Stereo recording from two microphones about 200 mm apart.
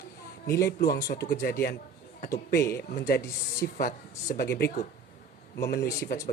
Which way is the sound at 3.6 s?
45° left (ahead or behind).